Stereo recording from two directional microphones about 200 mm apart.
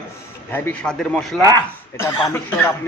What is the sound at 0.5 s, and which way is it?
Speech, 10° left (ahead or behind).